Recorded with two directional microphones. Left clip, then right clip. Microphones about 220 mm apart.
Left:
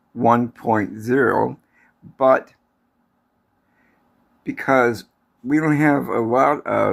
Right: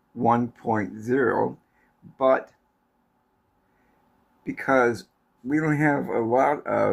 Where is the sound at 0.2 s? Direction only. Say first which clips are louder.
Left 5 dB; 30° left (ahead or behind).